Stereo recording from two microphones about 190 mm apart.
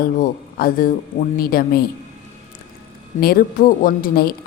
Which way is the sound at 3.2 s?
55° left (ahead or behind).